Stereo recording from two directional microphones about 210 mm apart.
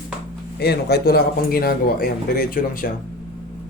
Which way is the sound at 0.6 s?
50° left (ahead or behind).